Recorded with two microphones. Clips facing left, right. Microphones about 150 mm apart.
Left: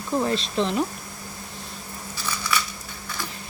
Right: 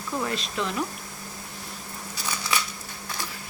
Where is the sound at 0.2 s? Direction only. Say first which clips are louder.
Left 5 dB; 30° left (ahead or behind).